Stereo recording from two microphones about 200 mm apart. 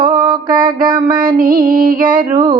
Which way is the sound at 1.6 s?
45° right (ahead or behind).